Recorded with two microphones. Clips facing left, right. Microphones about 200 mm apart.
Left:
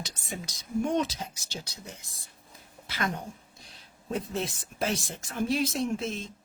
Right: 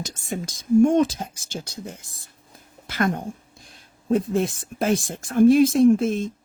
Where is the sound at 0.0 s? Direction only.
50° right (ahead or behind).